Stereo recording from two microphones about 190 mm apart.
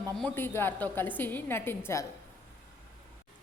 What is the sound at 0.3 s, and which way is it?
A woman's voice, 10° left (ahead or behind).